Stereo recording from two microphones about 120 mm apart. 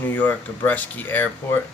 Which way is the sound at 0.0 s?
15° left (ahead or behind).